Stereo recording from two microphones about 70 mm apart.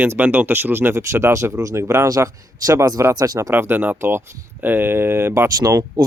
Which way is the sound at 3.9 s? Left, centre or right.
Right.